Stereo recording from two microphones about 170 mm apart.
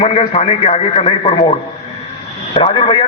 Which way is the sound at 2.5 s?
30° left (ahead or behind).